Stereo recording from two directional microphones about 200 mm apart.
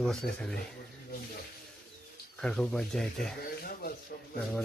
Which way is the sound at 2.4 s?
5° left (ahead or behind).